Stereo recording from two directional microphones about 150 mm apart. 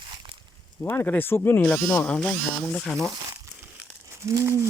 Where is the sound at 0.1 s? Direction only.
35° right (ahead or behind).